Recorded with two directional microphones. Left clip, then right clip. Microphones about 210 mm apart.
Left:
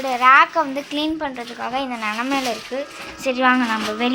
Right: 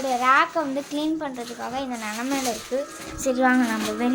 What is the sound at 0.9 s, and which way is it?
A woman's voice, centre (ahead or behind).